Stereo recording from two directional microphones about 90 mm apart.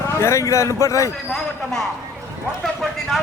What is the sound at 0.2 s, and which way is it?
Speech, 35° left (ahead or behind).